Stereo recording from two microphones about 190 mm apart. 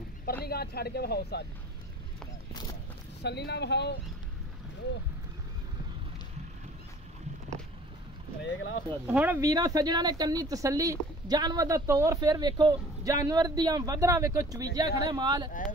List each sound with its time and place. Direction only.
0.5 s speech: 55° left (ahead or behind)
3.2 s speech: 60° left (ahead or behind)
8.4 s speech: 80° left
9.0 s speech: 10° right (ahead or behind)